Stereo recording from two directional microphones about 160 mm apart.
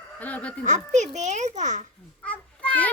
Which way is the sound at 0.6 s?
50° right (ahead or behind).